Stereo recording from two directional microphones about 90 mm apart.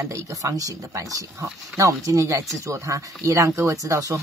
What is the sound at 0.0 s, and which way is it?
Speech, 35° right (ahead or behind).